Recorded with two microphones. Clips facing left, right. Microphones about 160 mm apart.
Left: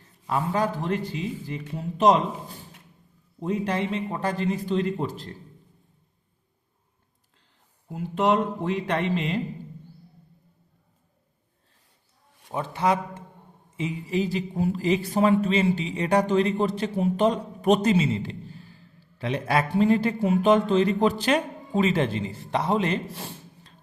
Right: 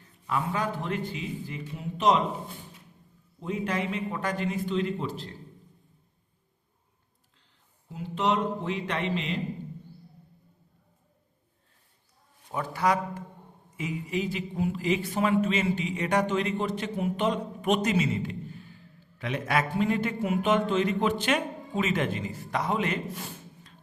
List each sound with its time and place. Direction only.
0.3 s a man's voice: 35° left (ahead or behind)
7.9 s speech: 50° left (ahead or behind)
12.5 s a man's voice: 25° left (ahead or behind)